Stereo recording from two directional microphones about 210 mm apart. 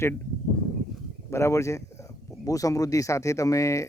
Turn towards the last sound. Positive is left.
turn(degrees=15)  # may be behind; listen again after turning